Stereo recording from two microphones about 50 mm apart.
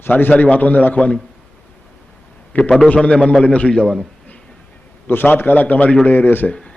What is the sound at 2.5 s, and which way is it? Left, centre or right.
Speech, left.